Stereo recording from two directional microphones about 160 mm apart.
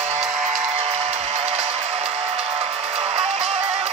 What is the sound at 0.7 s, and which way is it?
Music, 40° right (ahead or behind).